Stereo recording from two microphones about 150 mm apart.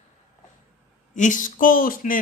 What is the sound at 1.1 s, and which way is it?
Speech, 55° left (ahead or behind).